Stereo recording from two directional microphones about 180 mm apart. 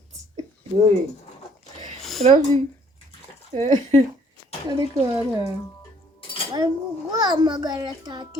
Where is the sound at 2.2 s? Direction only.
35° right (ahead or behind).